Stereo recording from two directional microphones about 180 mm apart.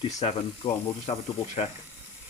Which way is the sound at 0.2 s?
30° left (ahead or behind).